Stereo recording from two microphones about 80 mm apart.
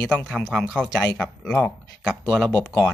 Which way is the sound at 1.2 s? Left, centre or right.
Centre.